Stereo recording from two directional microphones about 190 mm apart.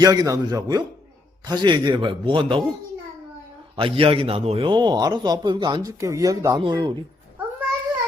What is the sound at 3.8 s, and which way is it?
A man's voice, 30° right (ahead or behind).